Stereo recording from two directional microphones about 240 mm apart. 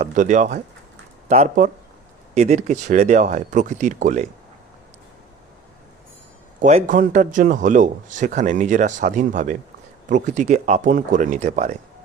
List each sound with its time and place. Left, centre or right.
0.0 s speech: right
6.6 s speech: right